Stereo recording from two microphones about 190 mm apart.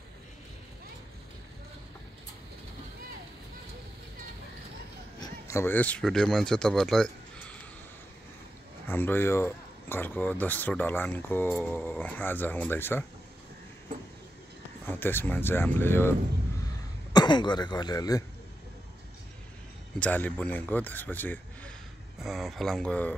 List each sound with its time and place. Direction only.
5.2 s speech: 15° left (ahead or behind)
8.8 s speech: 10° left (ahead or behind)
14.9 s speech: 10° left (ahead or behind)
17.1 s speech: 25° left (ahead or behind)
20.0 s a man's voice: 10° left (ahead or behind)